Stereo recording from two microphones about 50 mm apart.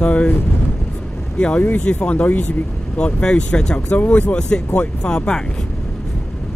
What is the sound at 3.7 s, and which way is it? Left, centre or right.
Speech, left.